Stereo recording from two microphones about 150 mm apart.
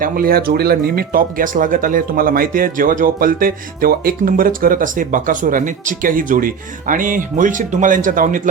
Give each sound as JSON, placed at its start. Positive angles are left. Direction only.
{"t": 0.0, "sound": "speech", "side_deg": -80}